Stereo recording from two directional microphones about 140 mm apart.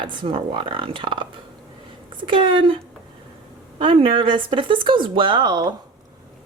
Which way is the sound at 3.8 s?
40° right (ahead or behind).